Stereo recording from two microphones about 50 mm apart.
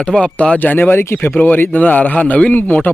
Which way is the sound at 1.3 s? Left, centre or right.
Left.